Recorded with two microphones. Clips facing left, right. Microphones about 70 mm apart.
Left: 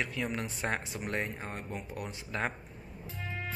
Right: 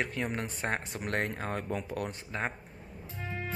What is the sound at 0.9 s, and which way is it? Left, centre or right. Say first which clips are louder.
Speech: right 2 dB; right.